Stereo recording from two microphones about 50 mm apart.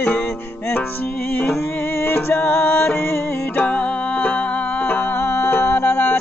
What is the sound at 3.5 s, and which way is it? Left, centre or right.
Music, left.